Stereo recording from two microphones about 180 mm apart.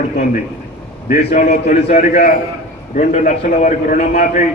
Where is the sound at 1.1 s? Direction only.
40° left (ahead or behind).